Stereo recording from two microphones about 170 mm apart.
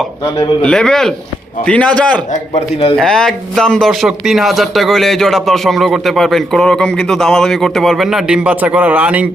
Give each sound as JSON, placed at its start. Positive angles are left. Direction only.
{"t": 0.6, "sound": "a man's voice", "side_deg": 5}
{"t": 2.3, "sound": "a man's voice", "side_deg": 40}
{"t": 2.9, "sound": "speech", "side_deg": 0}